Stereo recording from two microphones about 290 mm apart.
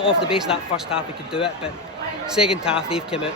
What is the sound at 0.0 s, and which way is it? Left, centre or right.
Speech, centre.